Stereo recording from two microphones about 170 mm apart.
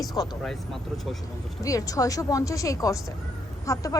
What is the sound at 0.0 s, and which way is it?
Vehicle, 20° left (ahead or behind).